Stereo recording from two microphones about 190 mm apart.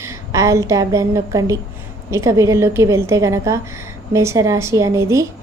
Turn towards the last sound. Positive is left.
turn(degrees=-15)  # may be behind; listen again after turning